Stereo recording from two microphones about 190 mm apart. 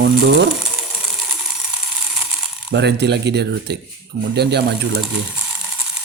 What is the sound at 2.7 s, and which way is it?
Speech, 65° right (ahead or behind).